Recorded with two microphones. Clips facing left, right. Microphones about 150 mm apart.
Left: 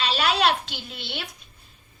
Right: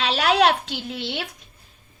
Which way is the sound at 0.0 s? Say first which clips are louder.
Right 4 dB; 70° right (ahead or behind).